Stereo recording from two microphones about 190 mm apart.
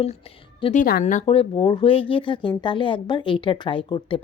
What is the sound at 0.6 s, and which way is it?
Speech, 40° left (ahead or behind).